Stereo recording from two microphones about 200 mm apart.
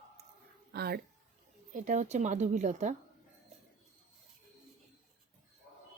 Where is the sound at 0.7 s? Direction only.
50° right (ahead or behind).